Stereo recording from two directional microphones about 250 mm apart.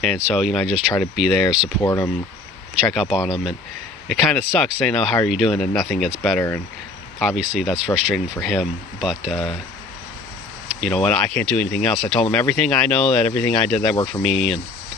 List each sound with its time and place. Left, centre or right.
0.0 s speech: centre
1.8 s speech: centre
2.9 s speech: centre
10.8 s speech: centre